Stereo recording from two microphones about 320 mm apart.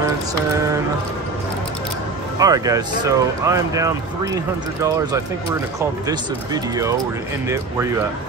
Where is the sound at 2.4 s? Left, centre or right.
Centre.